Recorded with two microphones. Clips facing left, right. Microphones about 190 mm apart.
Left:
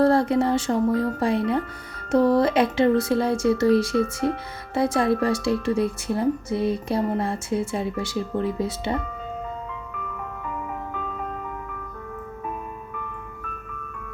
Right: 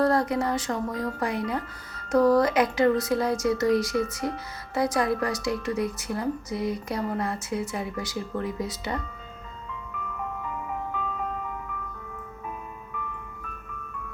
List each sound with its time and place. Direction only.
0.0 s speech: 30° left (ahead or behind)